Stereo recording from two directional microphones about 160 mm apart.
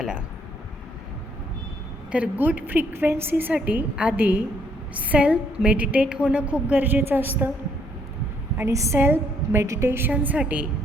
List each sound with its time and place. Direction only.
2.1 s a woman's voice: 10° right (ahead or behind)
8.5 s a woman's voice: 15° right (ahead or behind)